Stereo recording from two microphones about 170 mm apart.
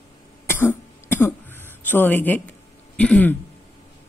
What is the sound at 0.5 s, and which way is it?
Cough, 15° left (ahead or behind).